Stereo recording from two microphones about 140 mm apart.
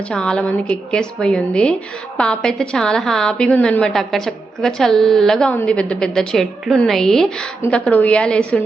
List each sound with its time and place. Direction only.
0.1 s a woman's voice: 5° left (ahead or behind)